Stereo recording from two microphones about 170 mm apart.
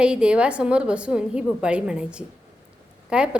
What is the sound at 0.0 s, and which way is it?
A woman's voice, 5° right (ahead or behind).